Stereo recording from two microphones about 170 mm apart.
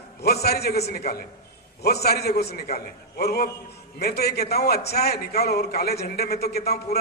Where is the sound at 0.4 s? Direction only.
70° left (ahead or behind).